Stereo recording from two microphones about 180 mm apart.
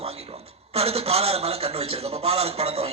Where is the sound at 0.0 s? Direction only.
35° right (ahead or behind).